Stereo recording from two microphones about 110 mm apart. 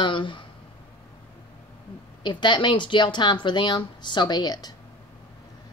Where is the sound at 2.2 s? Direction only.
45° left (ahead or behind).